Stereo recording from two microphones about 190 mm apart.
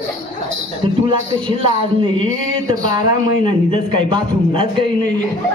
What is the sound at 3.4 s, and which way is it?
A man's voice, 25° right (ahead or behind).